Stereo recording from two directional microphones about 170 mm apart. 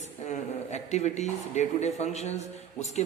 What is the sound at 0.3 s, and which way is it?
A man's voice, 40° left (ahead or behind).